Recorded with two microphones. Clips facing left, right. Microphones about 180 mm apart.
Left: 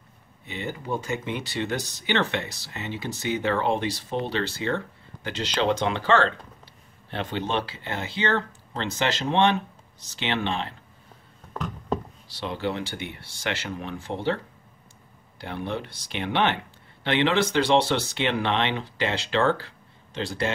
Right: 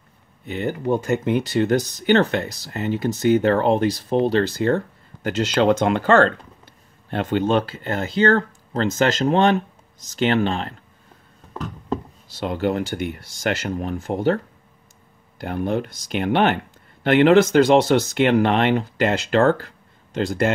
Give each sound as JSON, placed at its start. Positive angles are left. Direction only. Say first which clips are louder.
{"t": 0.5, "sound": "speech", "louder": "right 8 dB", "side_deg": -55}
{"t": 12.3, "sound": "speech", "louder": "right 7 dB", "side_deg": -50}